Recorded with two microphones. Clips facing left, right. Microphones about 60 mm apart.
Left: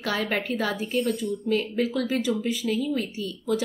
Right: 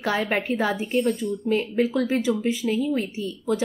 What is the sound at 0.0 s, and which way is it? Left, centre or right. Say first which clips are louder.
A woman's voice: right 3 dB; centre.